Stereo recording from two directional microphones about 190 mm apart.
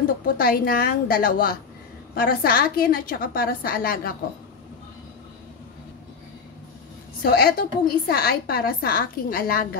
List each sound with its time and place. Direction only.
0.2 s a woman's voice: 50° left (ahead or behind)
7.2 s a woman's voice: 55° left (ahead or behind)